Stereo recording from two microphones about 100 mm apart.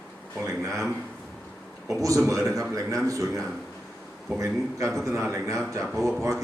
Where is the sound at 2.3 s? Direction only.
30° right (ahead or behind).